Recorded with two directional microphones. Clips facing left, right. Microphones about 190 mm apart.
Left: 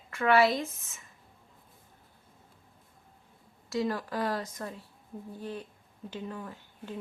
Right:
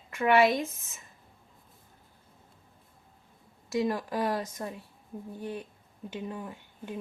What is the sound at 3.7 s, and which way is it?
Speech, 15° right (ahead or behind).